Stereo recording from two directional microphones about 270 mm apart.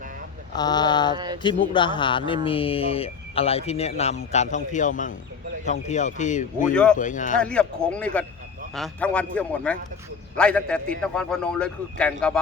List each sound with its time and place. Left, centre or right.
0.5 s speech: centre
1.1 s speech: centre
1.4 s speech: centre
7.3 s a man's voice: centre